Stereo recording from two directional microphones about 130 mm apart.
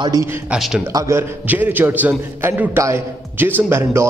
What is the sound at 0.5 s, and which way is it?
Speech, centre (ahead or behind).